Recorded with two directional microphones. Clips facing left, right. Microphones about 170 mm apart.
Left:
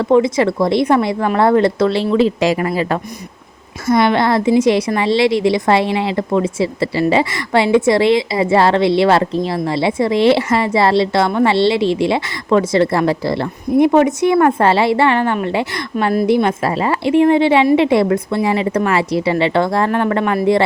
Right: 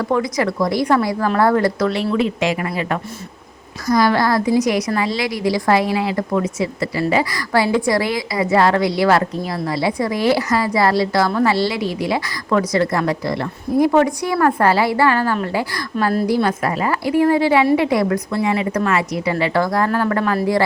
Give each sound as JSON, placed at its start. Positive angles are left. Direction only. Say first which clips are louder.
{"t": 0.0, "sound": "a woman's voice", "louder": "left 6 dB", "side_deg": 25}